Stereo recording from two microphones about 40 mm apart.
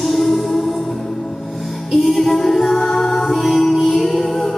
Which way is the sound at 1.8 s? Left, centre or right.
Centre.